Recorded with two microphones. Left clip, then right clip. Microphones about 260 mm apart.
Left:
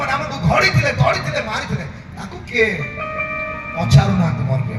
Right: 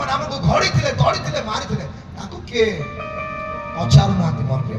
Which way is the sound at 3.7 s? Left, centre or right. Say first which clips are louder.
Even; left.